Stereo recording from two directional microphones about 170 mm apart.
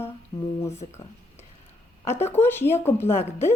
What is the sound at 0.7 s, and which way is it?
Speech, 40° left (ahead or behind).